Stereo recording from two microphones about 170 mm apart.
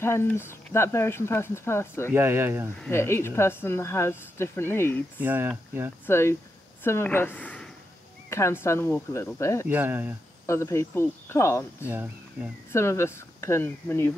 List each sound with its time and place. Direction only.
0.0 s speech: 15° left (ahead or behind)
2.1 s speech: 15° right (ahead or behind)
2.9 s speech: 15° left (ahead or behind)
5.2 s speech: 10° right (ahead or behind)
6.0 s speech: 15° left (ahead or behind)
9.7 s speech: 10° right (ahead or behind)
10.4 s speech: 15° left (ahead or behind)
11.9 s speech: 10° right (ahead or behind)
12.7 s speech: 15° left (ahead or behind)